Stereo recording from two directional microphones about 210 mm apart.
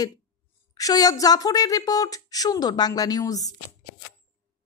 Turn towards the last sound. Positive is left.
turn(degrees=15)  # may be behind; listen again after turning